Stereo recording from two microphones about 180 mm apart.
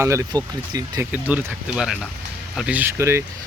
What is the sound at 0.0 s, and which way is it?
Speech, 15° right (ahead or behind).